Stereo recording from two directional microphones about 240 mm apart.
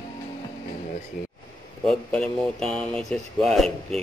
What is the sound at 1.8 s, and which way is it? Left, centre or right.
Speech, centre.